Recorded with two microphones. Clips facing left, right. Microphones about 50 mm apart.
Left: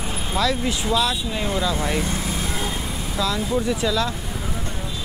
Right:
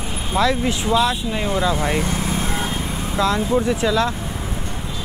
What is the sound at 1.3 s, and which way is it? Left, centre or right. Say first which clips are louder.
Vehicle: right 3 dB; right.